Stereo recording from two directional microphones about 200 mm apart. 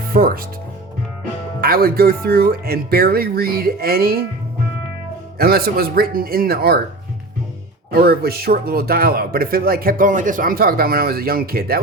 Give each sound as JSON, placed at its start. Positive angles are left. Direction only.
{"t": 0.1, "sound": "speech", "side_deg": -45}
{"t": 1.6, "sound": "speech", "side_deg": -50}
{"t": 5.4, "sound": "speech", "side_deg": -50}
{"t": 7.9, "sound": "speech", "side_deg": -50}